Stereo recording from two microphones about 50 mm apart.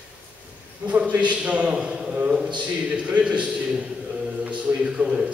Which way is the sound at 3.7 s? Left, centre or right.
Centre.